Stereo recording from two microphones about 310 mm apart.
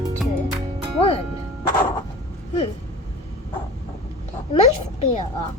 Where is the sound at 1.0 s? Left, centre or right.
Centre.